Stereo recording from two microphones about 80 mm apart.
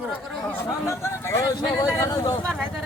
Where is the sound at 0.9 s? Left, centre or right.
Left.